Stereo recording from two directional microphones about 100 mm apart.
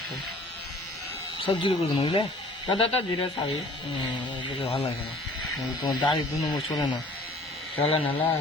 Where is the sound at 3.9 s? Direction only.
55° left (ahead or behind); by 4.9 s 75° left (ahead or behind).